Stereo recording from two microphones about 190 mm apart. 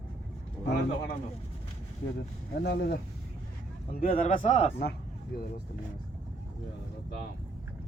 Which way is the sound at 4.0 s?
45° left (ahead or behind).